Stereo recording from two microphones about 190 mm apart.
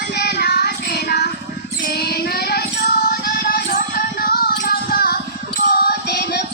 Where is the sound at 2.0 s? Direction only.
55° left (ahead or behind).